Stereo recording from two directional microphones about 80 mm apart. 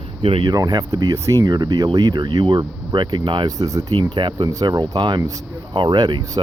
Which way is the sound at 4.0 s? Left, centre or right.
Right.